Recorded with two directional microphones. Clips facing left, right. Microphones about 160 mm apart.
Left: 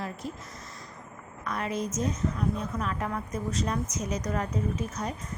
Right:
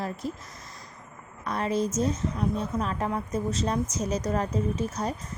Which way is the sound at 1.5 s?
30° right (ahead or behind).